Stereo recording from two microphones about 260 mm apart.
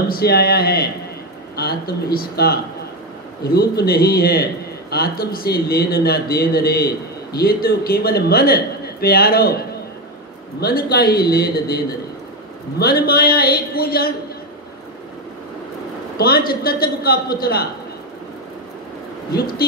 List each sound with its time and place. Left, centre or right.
0.1 s a man's voice: left
2.1 s a man's voice: left
10.6 s a man's voice: left
16.2 s a man's voice: left